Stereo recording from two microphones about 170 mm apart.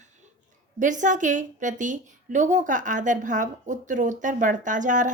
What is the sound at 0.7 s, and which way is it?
A woman's voice, 45° right (ahead or behind).